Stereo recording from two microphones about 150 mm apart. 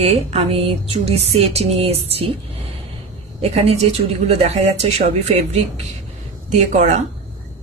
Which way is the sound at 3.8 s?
45° right (ahead or behind).